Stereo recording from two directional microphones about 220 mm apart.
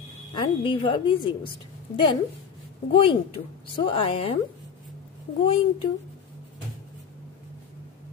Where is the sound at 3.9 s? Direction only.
25° left (ahead or behind).